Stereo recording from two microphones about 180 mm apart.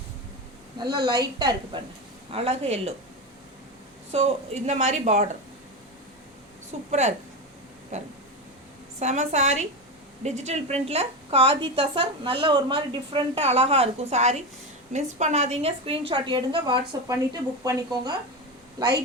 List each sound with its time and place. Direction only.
0.8 s a woman's voice: 25° right (ahead or behind)
2.3 s a woman's voice: 35° right (ahead or behind)
4.1 s a woman's voice: 35° right (ahead or behind)
6.7 s a woman's voice: 35° right (ahead or behind)
7.9 s a woman's voice: 40° right (ahead or behind); by 18.1 s 20° right (ahead or behind)